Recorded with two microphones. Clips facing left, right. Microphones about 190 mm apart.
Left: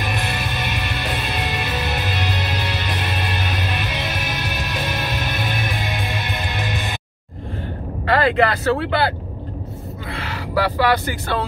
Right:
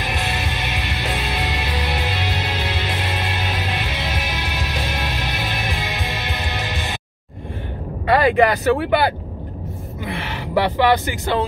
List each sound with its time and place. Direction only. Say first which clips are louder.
0.0 s music: even; 50° left (ahead or behind)
8.2 s speech: right 2 dB; 15° right (ahead or behind)